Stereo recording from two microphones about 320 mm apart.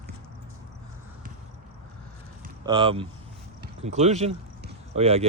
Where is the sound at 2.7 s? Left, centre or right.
Centre.